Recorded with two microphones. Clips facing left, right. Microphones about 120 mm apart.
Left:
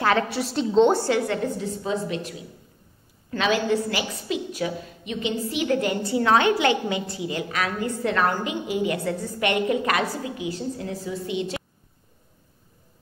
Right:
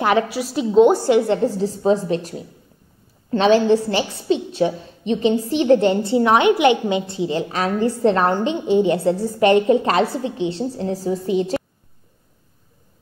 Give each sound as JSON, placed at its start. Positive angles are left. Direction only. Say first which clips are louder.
{"t": 0.3, "sound": "a woman's voice", "louder": "right 3 dB", "side_deg": -5}